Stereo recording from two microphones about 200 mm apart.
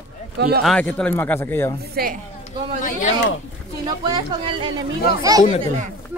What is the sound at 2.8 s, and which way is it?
Speech, 40° left (ahead or behind).